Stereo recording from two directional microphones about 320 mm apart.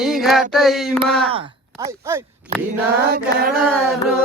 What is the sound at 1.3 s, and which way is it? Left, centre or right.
Speech, centre.